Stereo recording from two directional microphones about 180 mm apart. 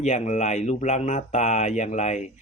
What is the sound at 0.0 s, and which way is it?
Speech, 40° left (ahead or behind).